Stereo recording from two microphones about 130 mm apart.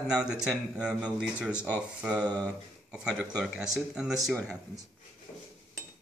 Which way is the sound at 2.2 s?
15° left (ahead or behind).